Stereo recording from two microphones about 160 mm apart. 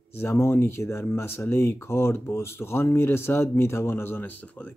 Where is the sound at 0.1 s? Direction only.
15° left (ahead or behind).